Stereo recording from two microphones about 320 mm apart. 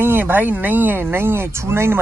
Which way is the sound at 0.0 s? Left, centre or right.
Centre.